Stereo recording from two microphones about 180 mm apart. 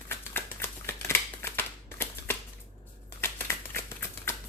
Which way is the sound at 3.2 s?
15° left (ahead or behind).